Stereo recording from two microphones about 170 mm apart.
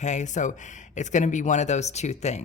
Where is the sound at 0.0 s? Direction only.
45° left (ahead or behind).